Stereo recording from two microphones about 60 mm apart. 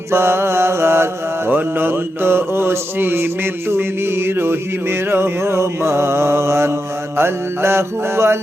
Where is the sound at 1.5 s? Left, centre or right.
Right.